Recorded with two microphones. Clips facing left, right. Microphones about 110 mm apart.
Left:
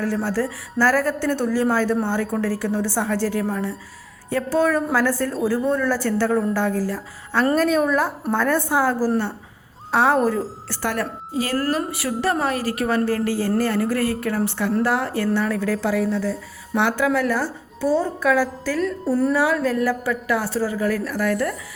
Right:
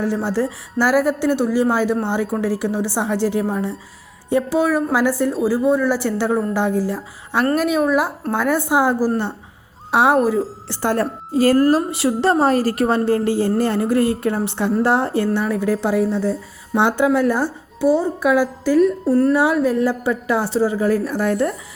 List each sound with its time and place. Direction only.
0.0 s a woman's voice: 20° right (ahead or behind)
10.2 s a woman's voice: 5° right (ahead or behind)
10.7 s a woman's voice: 30° right (ahead or behind)
19.0 s a woman's voice: 5° left (ahead or behind)
19.3 s speech: 20° right (ahead or behind)